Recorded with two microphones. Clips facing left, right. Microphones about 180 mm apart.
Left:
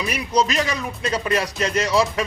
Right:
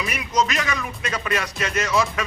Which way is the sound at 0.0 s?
35° left (ahead or behind).